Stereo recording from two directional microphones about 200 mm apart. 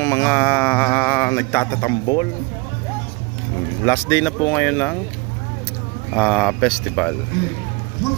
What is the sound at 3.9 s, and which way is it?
Speech, 10° left (ahead or behind).